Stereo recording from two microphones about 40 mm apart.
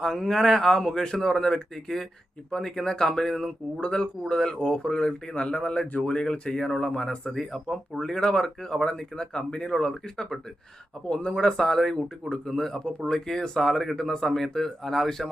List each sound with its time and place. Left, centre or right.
0.0 s speech: centre
3.8 s speech: left
7.3 s speech: centre
11.1 s speech: left
11.5 s speech: centre